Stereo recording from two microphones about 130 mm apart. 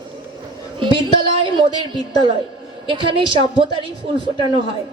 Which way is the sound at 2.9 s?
40° right (ahead or behind).